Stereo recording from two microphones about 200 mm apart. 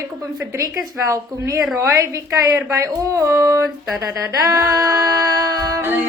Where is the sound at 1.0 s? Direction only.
15° right (ahead or behind).